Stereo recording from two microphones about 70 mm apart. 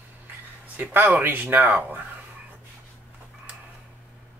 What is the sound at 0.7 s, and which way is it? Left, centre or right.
Speech, right.